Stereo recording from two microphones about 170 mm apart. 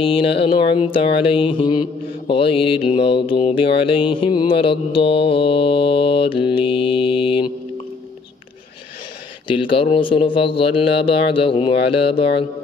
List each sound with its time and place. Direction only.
0.0 s mantra: 35° left (ahead or behind)
9.5 s mantra: 30° left (ahead or behind)